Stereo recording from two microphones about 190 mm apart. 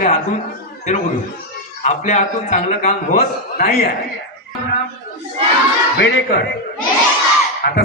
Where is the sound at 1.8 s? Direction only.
40° left (ahead or behind).